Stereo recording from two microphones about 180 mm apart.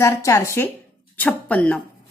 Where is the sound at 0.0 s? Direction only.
15° left (ahead or behind).